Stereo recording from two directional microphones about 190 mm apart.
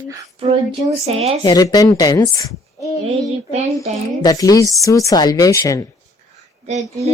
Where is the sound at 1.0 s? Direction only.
35° right (ahead or behind).